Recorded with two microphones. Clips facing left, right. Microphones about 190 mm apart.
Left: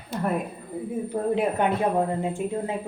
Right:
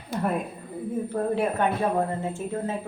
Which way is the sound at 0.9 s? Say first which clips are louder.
Even; 15° left (ahead or behind).